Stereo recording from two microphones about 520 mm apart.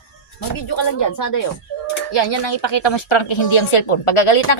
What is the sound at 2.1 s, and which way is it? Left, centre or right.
A woman's voice, left.